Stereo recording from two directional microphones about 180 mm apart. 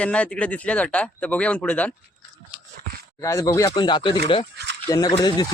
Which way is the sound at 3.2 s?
15° left (ahead or behind).